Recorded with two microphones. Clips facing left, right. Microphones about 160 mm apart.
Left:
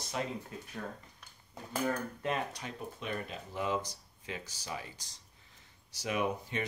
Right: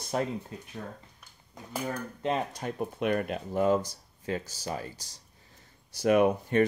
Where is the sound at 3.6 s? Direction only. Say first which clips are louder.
Right 8 dB; 45° right (ahead or behind).